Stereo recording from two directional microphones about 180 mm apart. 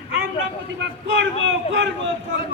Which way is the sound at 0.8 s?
85° right.